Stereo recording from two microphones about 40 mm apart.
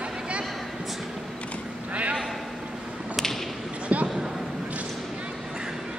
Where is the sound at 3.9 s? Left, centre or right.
Right.